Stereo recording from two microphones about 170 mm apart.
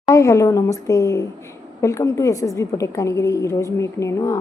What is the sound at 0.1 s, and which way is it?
A woman's voice, 20° left (ahead or behind).